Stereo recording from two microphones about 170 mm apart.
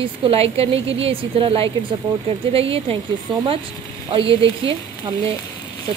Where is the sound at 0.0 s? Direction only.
35° right (ahead or behind).